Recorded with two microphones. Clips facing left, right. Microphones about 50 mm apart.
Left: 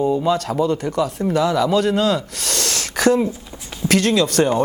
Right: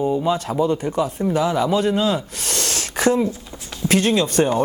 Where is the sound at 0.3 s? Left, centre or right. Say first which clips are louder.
Left 2 dB; left.